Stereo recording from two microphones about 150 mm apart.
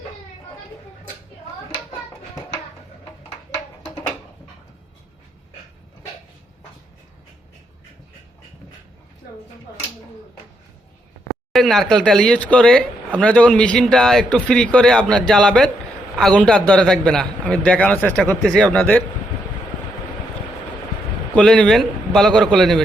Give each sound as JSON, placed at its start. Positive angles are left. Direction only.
{"t": 11.5, "sound": "a man's voice", "side_deg": 0}
{"t": 21.3, "sound": "speech", "side_deg": 5}